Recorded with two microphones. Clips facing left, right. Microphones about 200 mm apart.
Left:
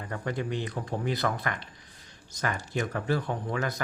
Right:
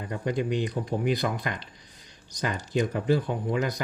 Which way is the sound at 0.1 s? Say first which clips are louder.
Right 4 dB; 15° right (ahead or behind).